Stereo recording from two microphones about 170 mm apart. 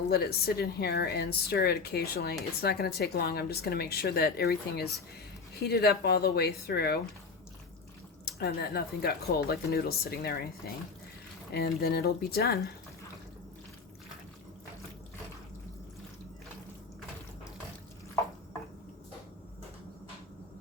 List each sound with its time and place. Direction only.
0.1 s speech: 70° left (ahead or behind)
8.2 s speech: 65° left (ahead or behind)
11.5 s speech: 65° left (ahead or behind)